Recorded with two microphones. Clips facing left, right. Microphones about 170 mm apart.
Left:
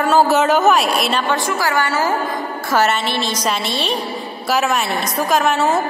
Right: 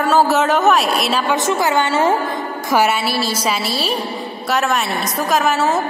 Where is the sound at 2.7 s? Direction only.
10° right (ahead or behind).